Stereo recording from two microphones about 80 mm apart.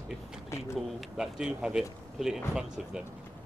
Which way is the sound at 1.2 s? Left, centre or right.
Centre.